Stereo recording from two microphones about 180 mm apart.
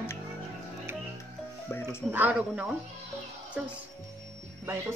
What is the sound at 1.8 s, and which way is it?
Speech, 10° right (ahead or behind).